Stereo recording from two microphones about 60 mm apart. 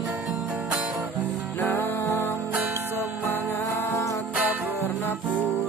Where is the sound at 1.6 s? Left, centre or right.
Left.